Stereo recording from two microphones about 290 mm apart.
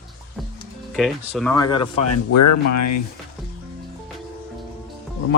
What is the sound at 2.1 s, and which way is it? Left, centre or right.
Speech, left.